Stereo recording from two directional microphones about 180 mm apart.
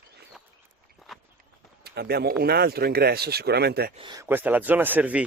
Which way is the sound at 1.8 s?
60° right (ahead or behind).